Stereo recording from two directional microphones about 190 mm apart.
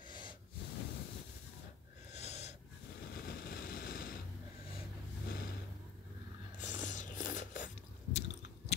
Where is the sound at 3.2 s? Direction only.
55° left (ahead or behind).